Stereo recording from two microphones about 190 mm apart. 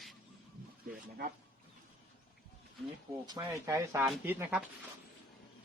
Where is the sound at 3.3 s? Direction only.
20° right (ahead or behind).